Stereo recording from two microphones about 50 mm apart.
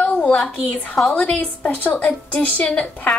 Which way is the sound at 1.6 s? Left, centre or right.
Left.